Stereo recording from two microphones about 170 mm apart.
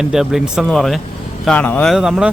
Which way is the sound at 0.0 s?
5° right (ahead or behind).